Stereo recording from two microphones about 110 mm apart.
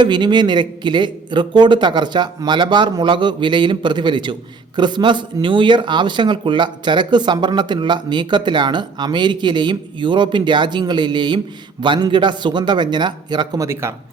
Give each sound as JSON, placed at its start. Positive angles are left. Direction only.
{"t": 0.0, "sound": "speech", "side_deg": -45}
{"t": 13.6, "sound": "a man's voice", "side_deg": -25}